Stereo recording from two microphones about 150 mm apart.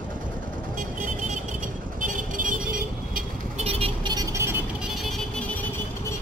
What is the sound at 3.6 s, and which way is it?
Vehicle, 40° right (ahead or behind).